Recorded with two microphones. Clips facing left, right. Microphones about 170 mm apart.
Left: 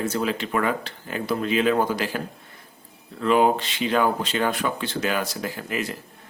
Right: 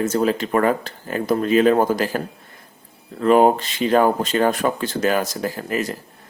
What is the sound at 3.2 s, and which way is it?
Speech, 45° right (ahead or behind).